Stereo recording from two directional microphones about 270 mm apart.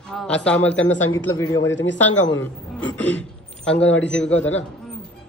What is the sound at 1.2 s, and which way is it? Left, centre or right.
Speech, centre.